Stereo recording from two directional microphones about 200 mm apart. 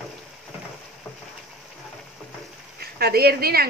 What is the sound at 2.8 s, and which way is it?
Speech, 50° right (ahead or behind).